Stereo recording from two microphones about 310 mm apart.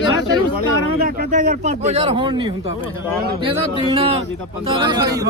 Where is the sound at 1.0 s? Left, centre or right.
Right.